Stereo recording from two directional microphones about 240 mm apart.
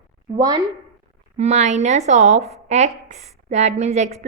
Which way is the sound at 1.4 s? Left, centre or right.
Right.